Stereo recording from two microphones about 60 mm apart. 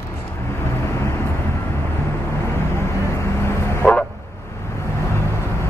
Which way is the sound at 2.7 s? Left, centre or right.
Left.